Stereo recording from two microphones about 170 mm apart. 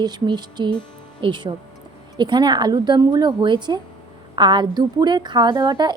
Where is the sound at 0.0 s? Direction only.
25° right (ahead or behind).